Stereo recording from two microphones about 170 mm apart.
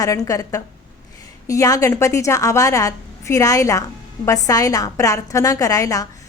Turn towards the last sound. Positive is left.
turn(degrees=20)  # may be behind; listen again after turning